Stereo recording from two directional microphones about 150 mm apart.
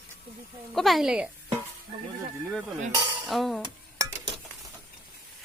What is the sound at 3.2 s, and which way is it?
Speech, centre (ahead or behind).